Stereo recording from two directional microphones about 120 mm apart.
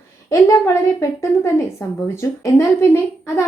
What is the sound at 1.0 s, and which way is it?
A woman's voice, 25° left (ahead or behind).